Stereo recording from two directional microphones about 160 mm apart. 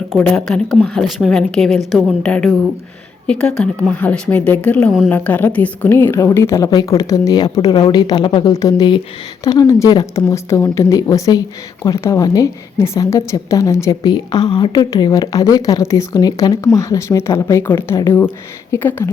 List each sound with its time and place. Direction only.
0.2 s a woman's voice: 5° left (ahead or behind)